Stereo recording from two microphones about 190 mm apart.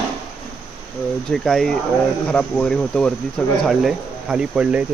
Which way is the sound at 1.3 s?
Centre (ahead or behind).